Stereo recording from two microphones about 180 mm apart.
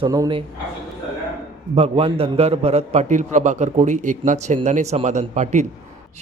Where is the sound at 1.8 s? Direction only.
30° right (ahead or behind).